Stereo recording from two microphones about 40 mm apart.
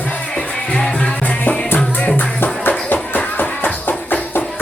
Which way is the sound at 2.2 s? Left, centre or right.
Left.